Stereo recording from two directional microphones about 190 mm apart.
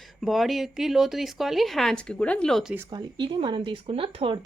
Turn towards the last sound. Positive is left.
turn(degrees=-30)  # may be behind; listen again after turning